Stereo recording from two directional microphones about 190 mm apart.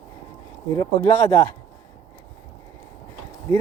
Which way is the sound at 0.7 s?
15° left (ahead or behind).